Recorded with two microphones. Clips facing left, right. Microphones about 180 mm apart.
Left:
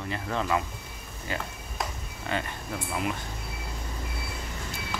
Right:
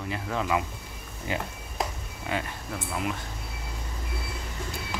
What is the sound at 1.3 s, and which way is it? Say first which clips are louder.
Speech: right 2 dB; 15° right (ahead or behind).